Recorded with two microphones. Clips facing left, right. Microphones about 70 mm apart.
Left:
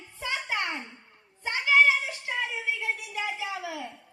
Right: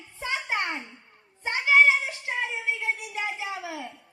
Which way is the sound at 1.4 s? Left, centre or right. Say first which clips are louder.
Right 2 dB; right.